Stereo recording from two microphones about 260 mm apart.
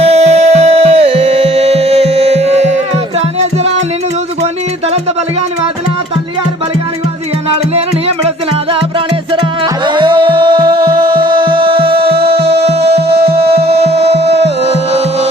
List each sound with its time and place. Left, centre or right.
0.0 s music: right
9.8 s music: centre
12.0 s music: right
12.4 s music: right
14.2 s music: right
14.7 s music: right